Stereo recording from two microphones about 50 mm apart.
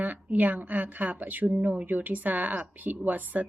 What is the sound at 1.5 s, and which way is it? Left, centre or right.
Speech, right.